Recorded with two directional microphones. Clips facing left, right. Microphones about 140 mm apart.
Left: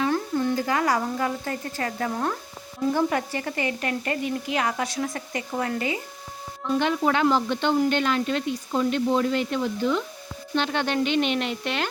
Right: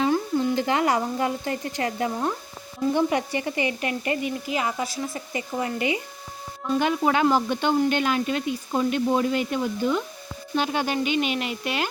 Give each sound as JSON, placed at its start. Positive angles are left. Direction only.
{"t": 0.1, "sound": "a sound", "side_deg": -15}
{"t": 0.5, "sound": "a woman's voice", "side_deg": -25}
{"t": 3.5, "sound": "speech", "side_deg": 50}
{"t": 3.8, "sound": "speech", "side_deg": -10}
{"t": 6.7, "sound": "speech", "side_deg": -10}